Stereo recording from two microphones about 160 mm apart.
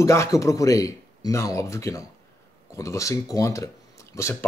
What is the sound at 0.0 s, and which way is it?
Speech, 20° left (ahead or behind).